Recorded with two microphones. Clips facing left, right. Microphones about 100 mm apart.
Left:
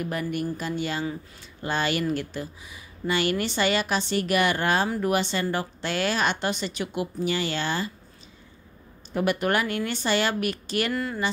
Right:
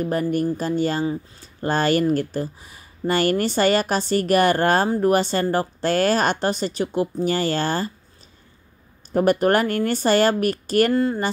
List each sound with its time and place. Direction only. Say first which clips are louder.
0.0 s a woman's voice: right 7 dB; 40° right (ahead or behind)
9.1 s speech: right 7 dB; 40° right (ahead or behind)